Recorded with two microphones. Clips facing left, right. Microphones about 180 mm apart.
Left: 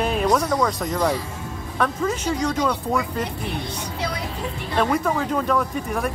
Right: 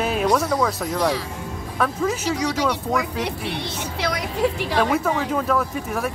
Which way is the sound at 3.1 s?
75° right (ahead or behind).